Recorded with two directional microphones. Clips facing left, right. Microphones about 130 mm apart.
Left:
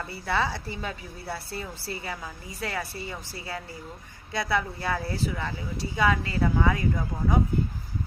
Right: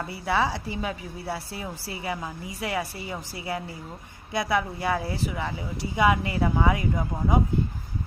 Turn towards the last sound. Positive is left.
turn(degrees=-20)  # may be behind; listen again after turning